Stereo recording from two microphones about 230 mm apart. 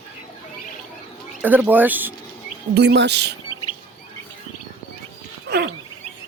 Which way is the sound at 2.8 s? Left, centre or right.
Right.